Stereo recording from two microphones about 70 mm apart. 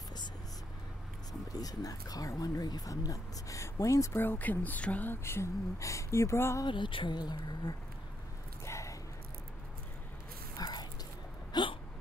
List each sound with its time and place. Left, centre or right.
1.5 s speech: left
4.2 s speech: left
5.1 s speech: left
6.6 s speech: left
8.6 s a sound: left
10.6 s dog: left
11.5 s hiccup: left